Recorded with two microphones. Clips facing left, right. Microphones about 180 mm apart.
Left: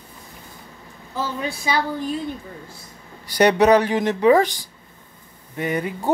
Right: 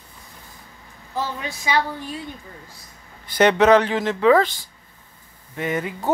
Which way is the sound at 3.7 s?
15° left (ahead or behind).